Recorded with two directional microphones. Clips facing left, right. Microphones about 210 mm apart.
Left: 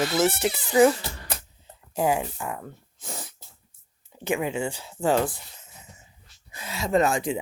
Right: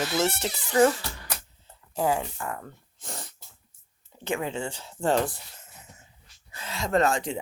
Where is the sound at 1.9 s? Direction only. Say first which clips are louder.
Left 2 dB; 15° left (ahead or behind).